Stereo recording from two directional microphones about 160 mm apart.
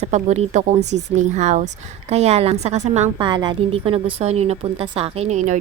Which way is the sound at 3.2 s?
30° right (ahead or behind).